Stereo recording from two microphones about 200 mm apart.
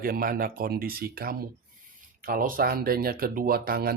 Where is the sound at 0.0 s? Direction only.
45° right (ahead or behind).